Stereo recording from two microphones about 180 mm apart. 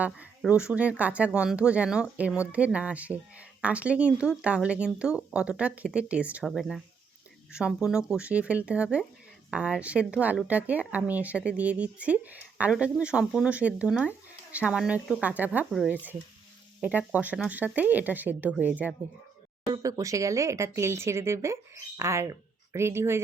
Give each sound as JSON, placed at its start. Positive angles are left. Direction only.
{"t": 0.0, "sound": "speech", "side_deg": -5}
{"t": 19.7, "sound": "speech", "side_deg": -20}